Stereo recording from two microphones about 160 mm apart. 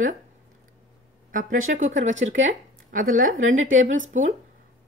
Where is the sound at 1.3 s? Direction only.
55° right (ahead or behind).